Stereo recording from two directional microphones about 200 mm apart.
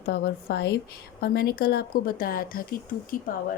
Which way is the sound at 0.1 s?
55° left (ahead or behind).